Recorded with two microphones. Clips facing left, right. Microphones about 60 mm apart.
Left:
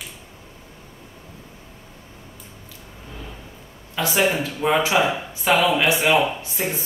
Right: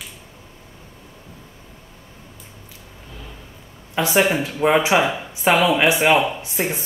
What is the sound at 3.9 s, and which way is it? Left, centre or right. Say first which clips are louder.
Speech: right 3 dB; right.